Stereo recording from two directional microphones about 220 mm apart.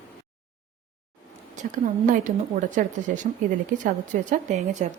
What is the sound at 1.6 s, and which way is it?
A woman's voice, 35° right (ahead or behind).